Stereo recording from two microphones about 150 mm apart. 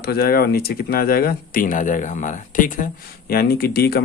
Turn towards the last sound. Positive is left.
turn(degrees=90)